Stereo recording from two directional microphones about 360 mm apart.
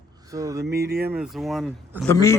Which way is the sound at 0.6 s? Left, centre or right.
Right.